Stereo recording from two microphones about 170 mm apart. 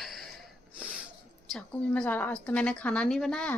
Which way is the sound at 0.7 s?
5° right (ahead or behind).